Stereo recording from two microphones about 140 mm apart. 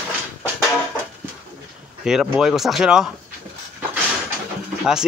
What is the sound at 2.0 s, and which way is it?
Speech, 5° right (ahead or behind).